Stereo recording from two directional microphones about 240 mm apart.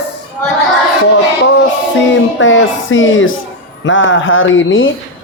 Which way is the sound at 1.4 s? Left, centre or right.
Left.